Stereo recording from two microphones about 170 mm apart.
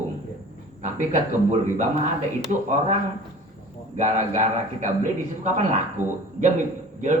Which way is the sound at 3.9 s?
45° right (ahead or behind).